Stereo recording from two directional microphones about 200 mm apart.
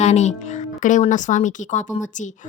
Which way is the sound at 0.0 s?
35° left (ahead or behind).